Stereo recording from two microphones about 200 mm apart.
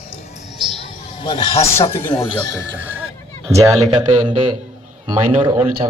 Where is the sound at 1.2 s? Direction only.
25° left (ahead or behind).